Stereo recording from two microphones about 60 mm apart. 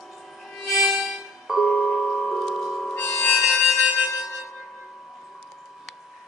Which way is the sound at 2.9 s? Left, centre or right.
Left.